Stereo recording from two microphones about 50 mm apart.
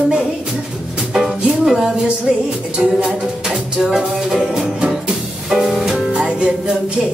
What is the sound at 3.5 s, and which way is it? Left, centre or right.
Music, centre.